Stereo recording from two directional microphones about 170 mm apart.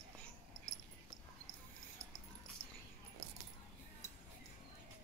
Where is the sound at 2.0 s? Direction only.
20° right (ahead or behind).